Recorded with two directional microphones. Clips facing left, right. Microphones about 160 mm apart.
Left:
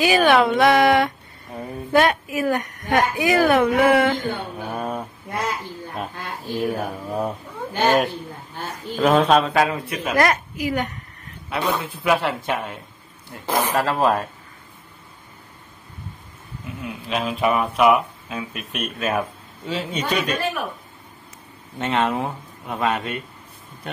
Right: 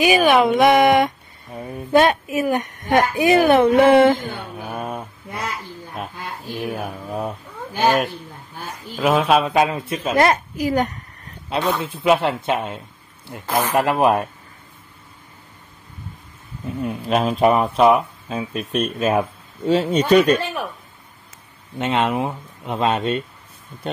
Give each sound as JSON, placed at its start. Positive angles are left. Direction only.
{"t": 0.0, "sound": "a woman's voice", "side_deg": -15}
{"t": 4.6, "sound": "speech", "side_deg": -5}
{"t": 6.6, "sound": "speech", "side_deg": 0}
{"t": 8.9, "sound": "speech", "side_deg": -5}
{"t": 9.5, "sound": "a woman's voice", "side_deg": -20}
{"t": 10.6, "sound": "speech", "side_deg": -40}
{"t": 11.4, "sound": "a man's voice", "side_deg": -25}
{"t": 16.8, "sound": "speech", "side_deg": -45}
{"t": 19.7, "sound": "speech", "side_deg": -40}
{"t": 21.7, "sound": "a woman's voice", "side_deg": -15}